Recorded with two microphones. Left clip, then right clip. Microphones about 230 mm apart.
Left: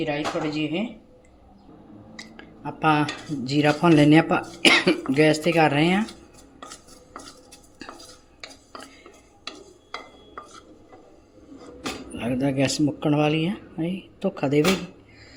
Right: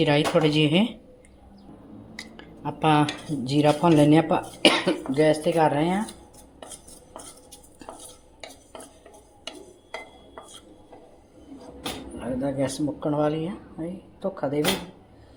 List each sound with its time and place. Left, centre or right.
0.0 s speech: right
2.1 s speech: centre
12.4 s speech: left
13.1 s speech: left
14.2 s speech: left